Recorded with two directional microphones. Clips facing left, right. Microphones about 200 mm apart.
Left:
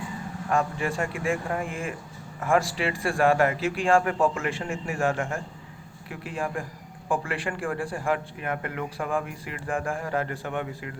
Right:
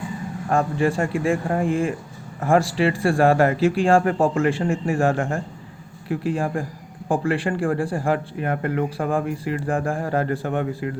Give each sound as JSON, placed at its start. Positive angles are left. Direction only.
{"t": 0.5, "sound": "speech", "side_deg": -30}